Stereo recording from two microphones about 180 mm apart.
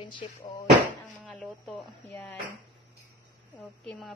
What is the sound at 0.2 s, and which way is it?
Speech, 30° left (ahead or behind).